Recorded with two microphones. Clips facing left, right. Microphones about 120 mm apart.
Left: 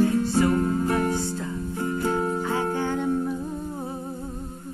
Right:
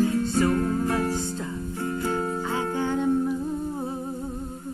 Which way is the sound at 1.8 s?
20° left (ahead or behind).